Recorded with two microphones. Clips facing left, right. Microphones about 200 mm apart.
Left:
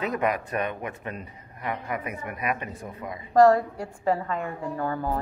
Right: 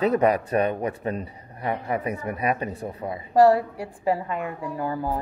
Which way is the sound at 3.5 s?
10° right (ahead or behind).